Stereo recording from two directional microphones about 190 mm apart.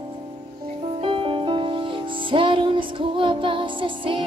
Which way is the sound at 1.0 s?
30° right (ahead or behind).